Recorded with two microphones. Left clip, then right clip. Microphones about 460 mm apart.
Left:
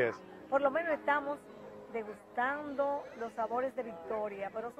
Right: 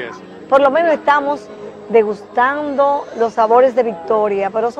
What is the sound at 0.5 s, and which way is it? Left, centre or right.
Speech, right.